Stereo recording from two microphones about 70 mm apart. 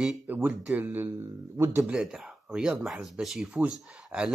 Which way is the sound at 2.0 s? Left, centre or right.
Centre.